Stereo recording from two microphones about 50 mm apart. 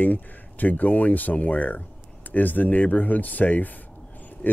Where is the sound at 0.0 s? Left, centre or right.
Left.